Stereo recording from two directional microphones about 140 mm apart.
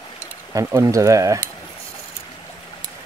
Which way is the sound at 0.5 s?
20° right (ahead or behind).